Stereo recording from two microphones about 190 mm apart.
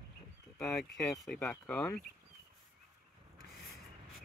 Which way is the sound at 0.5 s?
Centre (ahead or behind).